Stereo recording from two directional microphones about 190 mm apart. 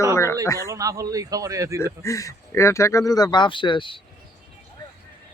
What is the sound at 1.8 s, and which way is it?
Speech, 15° left (ahead or behind).